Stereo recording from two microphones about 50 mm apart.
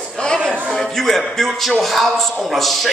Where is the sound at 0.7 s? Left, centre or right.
Centre.